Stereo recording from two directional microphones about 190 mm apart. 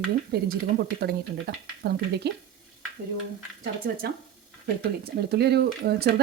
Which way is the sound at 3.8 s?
55° right (ahead or behind).